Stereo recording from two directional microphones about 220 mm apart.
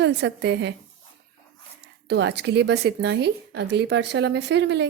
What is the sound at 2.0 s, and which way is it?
A woman's voice, 50° right (ahead or behind).